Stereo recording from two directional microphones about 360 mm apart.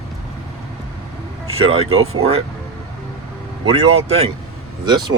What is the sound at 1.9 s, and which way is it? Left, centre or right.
Speech, right.